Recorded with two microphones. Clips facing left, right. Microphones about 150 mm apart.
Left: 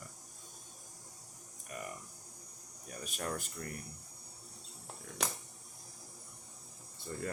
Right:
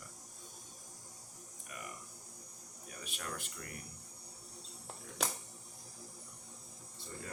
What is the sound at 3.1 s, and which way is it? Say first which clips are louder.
Speech: left 6 dB; 40° left (ahead or behind).